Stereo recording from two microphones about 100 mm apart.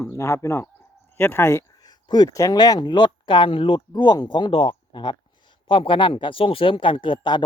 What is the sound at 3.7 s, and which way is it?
Speech, 45° left (ahead or behind).